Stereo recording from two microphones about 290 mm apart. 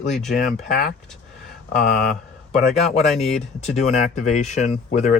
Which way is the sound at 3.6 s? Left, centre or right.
Left.